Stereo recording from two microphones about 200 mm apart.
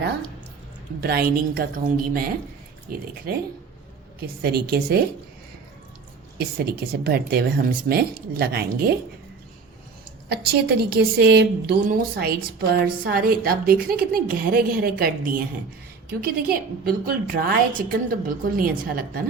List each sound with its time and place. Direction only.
1.0 s a woman's voice: 50° right (ahead or behind)
4.2 s a woman's voice: 50° right (ahead or behind)
6.4 s a woman's voice: 50° right (ahead or behind)
10.3 s a woman's voice: 55° right (ahead or behind)